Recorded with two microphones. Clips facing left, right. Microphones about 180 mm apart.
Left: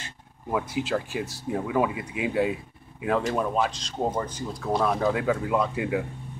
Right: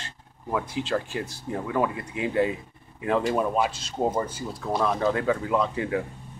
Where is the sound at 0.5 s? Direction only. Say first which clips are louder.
Even; 10° left (ahead or behind); by 4.8 s 10° right (ahead or behind).